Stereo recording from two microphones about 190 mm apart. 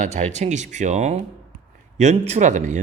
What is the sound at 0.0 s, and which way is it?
Speech, 40° right (ahead or behind).